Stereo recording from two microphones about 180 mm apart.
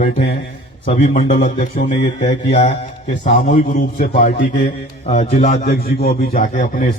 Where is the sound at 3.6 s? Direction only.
55° left (ahead or behind).